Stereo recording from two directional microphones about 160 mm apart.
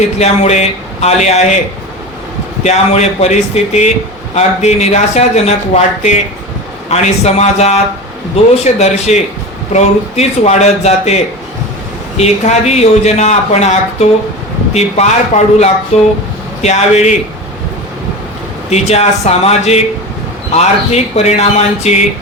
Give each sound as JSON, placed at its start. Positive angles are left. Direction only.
{"t": 0.2, "sound": "a man's voice", "side_deg": 45}
{"t": 2.6, "sound": "a man's voice", "side_deg": 45}
{"t": 18.7, "sound": "a man's voice", "side_deg": 40}